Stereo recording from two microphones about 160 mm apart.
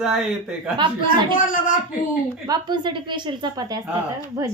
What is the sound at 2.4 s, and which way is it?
Speech, 25° right (ahead or behind).